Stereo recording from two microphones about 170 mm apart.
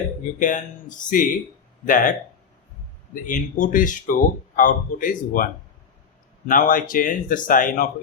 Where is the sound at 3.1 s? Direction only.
50° left (ahead or behind).